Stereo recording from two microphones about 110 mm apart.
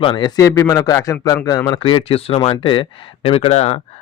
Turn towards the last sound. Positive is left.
turn(degrees=75)  # may be behind; listen again after turning